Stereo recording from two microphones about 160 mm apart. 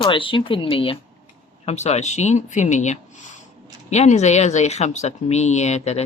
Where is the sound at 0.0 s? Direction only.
30° left (ahead or behind).